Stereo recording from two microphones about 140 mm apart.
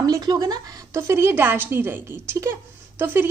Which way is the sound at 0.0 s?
30° right (ahead or behind).